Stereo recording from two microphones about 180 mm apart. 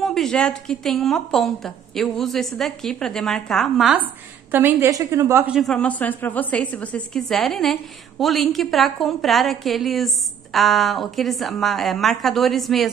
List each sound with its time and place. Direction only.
0.0 s a woman's voice: centre (ahead or behind)